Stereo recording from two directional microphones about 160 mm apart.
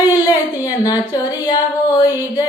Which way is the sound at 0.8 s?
25° left (ahead or behind).